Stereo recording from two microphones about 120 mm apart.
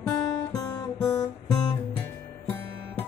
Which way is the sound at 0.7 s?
30° left (ahead or behind).